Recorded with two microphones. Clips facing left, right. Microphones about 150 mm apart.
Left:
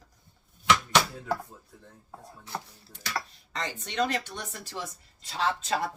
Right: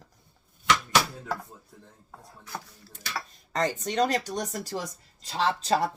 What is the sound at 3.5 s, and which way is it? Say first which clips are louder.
Speech: right 10 dB; 45° right (ahead or behind).